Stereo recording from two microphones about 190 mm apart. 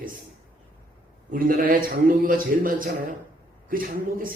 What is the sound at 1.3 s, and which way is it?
Speech, 45° right (ahead or behind).